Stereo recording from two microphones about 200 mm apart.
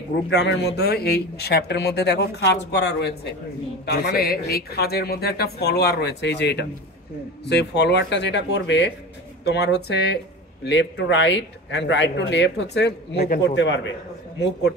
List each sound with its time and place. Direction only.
0.3 s speech: 60° left (ahead or behind)
13.6 s a man's voice: 65° left (ahead or behind)